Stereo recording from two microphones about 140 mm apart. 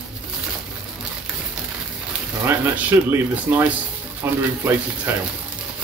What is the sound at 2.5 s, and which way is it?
Speech, 10° right (ahead or behind).